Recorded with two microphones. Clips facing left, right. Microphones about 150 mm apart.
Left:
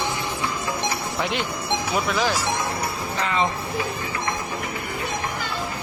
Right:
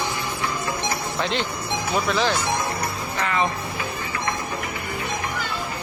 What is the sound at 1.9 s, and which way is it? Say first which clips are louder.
Speech: right 2 dB; 10° left (ahead or behind).